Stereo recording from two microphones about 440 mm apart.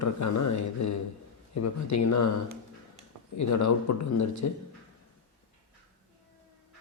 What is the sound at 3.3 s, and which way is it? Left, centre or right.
Speech, left.